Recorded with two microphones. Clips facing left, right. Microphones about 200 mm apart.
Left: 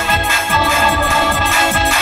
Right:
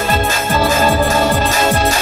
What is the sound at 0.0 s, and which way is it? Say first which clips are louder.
Music: right 3 dB; 45° right (ahead or behind).